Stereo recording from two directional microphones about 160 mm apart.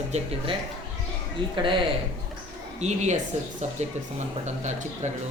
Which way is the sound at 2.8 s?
45° right (ahead or behind).